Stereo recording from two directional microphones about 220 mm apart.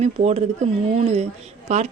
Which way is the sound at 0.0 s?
30° right (ahead or behind).